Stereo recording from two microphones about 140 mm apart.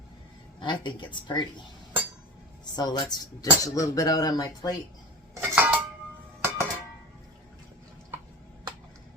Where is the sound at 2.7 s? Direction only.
30° left (ahead or behind).